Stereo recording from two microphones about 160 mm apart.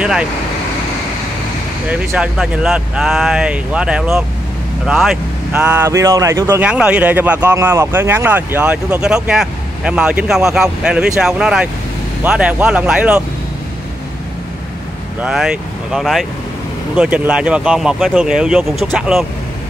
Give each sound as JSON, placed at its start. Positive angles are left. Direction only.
{"t": 0.0, "sound": "speech", "side_deg": -5}
{"t": 1.9, "sound": "speech", "side_deg": -5}
{"t": 5.9, "sound": "speech", "side_deg": -20}
{"t": 6.6, "sound": "speech", "side_deg": -5}
{"t": 15.2, "sound": "speech", "side_deg": 0}